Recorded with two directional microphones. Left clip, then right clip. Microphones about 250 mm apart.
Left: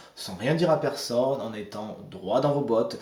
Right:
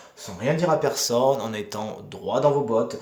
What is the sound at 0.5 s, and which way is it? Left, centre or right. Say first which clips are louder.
Speech: right 2 dB; right.